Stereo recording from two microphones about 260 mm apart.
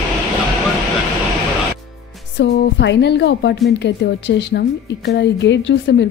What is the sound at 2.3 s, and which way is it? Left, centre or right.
A woman's voice, left.